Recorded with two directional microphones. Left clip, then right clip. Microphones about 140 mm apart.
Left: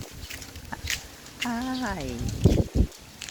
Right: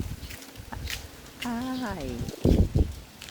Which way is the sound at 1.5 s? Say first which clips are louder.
Left 2 dB; 10° left (ahead or behind).